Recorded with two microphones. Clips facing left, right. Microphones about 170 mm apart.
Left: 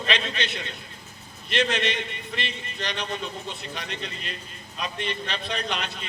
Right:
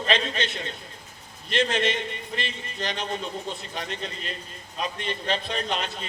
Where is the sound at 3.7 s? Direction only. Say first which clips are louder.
Right 2 dB; 40° right (ahead or behind).